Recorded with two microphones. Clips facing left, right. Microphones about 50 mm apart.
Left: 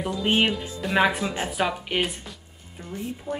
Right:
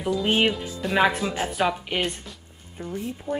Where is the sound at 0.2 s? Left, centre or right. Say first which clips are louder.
Left 2 dB; centre.